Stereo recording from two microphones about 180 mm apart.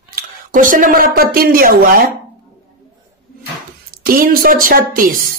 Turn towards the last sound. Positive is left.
turn(degrees=-50)  # may be behind; listen again after turning